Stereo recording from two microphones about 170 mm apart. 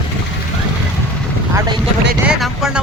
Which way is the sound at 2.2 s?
5° right (ahead or behind).